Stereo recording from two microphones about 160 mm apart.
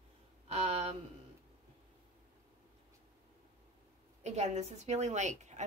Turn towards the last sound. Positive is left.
turn(degrees=-45)  # may be behind; listen again after turning